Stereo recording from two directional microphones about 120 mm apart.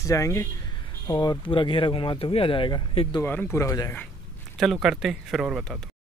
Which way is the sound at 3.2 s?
20° left (ahead or behind).